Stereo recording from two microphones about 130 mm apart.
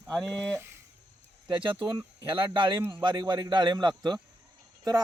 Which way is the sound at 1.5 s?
40° right (ahead or behind).